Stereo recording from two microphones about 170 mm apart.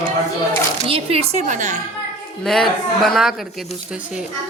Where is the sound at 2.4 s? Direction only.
Centre (ahead or behind).